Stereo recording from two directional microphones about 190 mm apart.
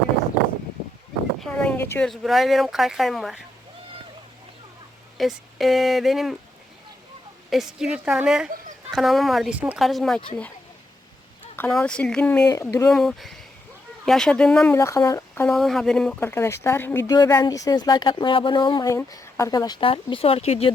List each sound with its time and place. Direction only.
1.4 s speech: 5° left (ahead or behind)
5.1 s speech: centre (ahead or behind)
7.5 s speech: centre (ahead or behind)
11.5 s speech: 10° left (ahead or behind)
12.5 s speech: 15° left (ahead or behind)
12.9 s speech: centre (ahead or behind)
14.8 s speech: 15° left (ahead or behind)
15.5 s speech: centre (ahead or behind); by 20.7 s 30° left (ahead or behind)